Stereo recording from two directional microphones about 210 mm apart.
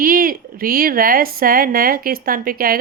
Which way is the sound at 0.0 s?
45° right (ahead or behind).